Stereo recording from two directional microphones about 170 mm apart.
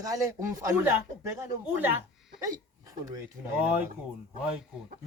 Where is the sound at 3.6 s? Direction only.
10° right (ahead or behind).